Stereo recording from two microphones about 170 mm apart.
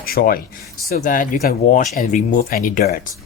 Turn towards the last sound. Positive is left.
turn(degrees=50)  # may be behind; listen again after turning